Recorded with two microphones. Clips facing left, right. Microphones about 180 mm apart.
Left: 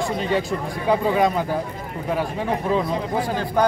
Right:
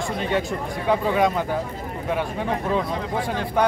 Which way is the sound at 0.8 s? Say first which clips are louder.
Left 1 dB; centre (ahead or behind).